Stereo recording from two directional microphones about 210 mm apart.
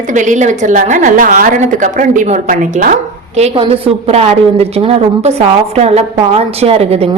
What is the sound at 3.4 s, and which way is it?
A woman's voice, 30° right (ahead or behind).